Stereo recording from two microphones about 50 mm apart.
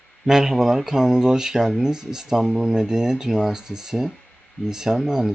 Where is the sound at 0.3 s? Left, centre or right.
Centre.